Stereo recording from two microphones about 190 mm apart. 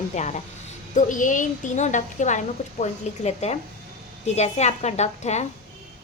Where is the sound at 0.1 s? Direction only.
35° left (ahead or behind).